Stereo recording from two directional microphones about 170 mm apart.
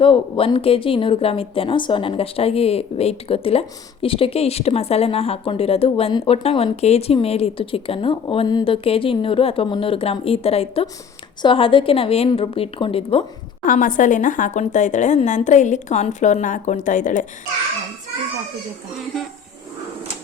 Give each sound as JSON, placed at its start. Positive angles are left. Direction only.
{"t": 0.0, "sound": "a woman's voice", "side_deg": 30}
{"t": 13.7, "sound": "a woman's voice", "side_deg": 50}